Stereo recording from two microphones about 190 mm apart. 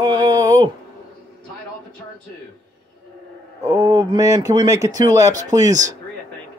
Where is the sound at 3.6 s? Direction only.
15° right (ahead or behind).